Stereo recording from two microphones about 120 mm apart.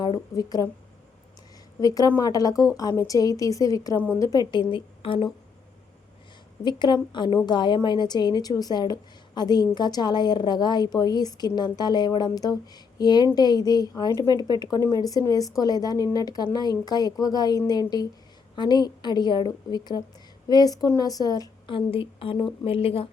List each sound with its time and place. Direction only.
0.0 s a woman's voice: 35° left (ahead or behind)
1.8 s a woman's voice: 30° left (ahead or behind)
6.7 s a woman's voice: 40° left (ahead or behind)
21.7 s speech: 50° left (ahead or behind)